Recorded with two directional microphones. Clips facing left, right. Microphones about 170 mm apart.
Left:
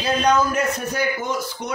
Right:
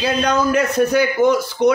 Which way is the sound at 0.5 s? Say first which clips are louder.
Right 8 dB; 75° right (ahead or behind).